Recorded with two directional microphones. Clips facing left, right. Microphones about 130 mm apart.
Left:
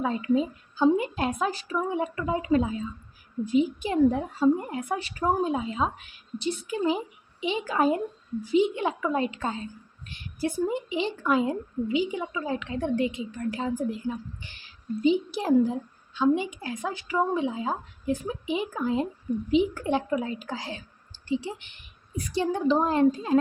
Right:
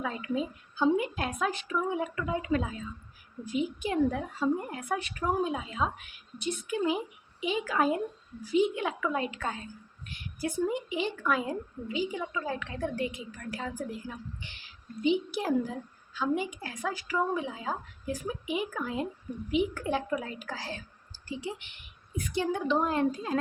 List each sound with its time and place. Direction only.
0.0 s a woman's voice: 30° left (ahead or behind)
21.6 s a woman's voice: 35° left (ahead or behind)